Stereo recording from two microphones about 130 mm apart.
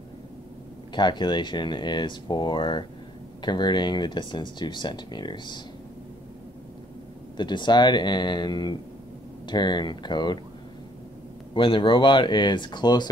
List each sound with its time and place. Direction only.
0.9 s speech: 35° left (ahead or behind)
7.3 s speech: 35° left (ahead or behind)
11.5 s speech: 40° left (ahead or behind)